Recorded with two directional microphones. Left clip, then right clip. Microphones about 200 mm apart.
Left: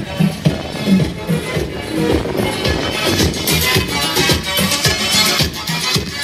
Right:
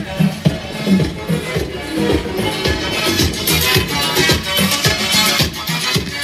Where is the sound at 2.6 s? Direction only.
60° right (ahead or behind).